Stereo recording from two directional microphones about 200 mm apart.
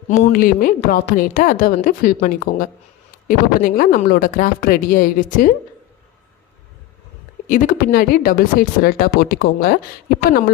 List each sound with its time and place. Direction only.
0.1 s a woman's voice: 40° left (ahead or behind)
7.4 s a woman's voice: 45° left (ahead or behind)